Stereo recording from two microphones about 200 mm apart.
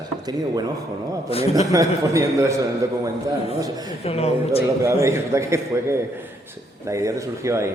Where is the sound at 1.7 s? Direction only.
15° right (ahead or behind).